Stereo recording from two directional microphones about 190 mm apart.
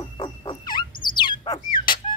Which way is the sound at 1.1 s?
25° left (ahead or behind).